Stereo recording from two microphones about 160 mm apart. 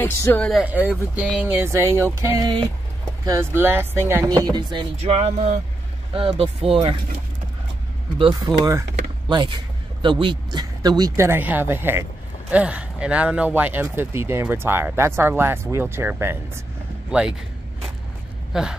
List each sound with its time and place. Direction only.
0.0 s speech: 10° left (ahead or behind)
0.5 s speech: 5° right (ahead or behind)
4.1 s music: 20° right (ahead or behind)
5.0 s speech: 40° right (ahead or behind)
8.5 s speech: centre (ahead or behind)
9.3 s music: 30° right (ahead or behind)
10.0 s speech: 30° right (ahead or behind); by 17.4 s 5° right (ahead or behind)
18.5 s speech: 5° right (ahead or behind)